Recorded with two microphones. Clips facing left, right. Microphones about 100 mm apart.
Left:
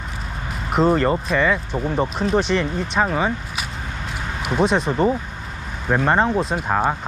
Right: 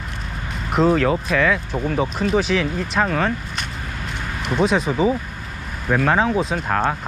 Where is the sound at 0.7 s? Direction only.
Centre (ahead or behind).